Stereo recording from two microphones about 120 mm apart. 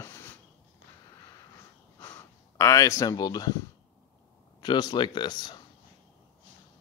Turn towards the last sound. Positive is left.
turn(degrees=40)  # may be behind; listen again after turning